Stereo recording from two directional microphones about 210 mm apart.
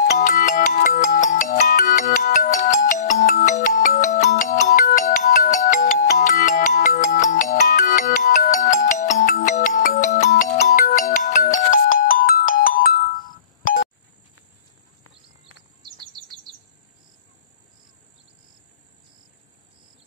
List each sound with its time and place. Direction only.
0.2 s music: 40° left (ahead or behind)
12.0 s ringtone: 40° left (ahead or behind)
15.8 s chirp: 20° right (ahead or behind)